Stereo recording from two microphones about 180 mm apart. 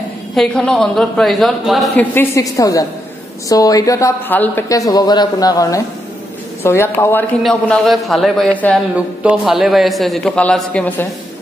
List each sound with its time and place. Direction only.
0.4 s a man's voice: 5° left (ahead or behind)
2.1 s a woman's voice: 15° left (ahead or behind)
7.4 s a man's voice: centre (ahead or behind)
8.9 s a man's voice: 5° right (ahead or behind)